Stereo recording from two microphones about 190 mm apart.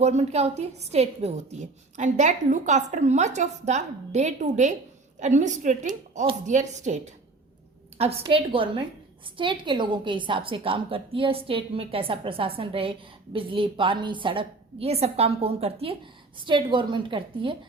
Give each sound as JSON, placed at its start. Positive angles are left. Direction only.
{"t": 0.0, "sound": "a woman's voice", "side_deg": -35}